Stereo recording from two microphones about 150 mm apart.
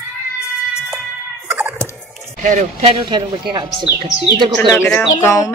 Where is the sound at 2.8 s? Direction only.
35° right (ahead or behind).